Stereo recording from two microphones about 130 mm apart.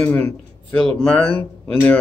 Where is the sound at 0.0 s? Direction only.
15° left (ahead or behind).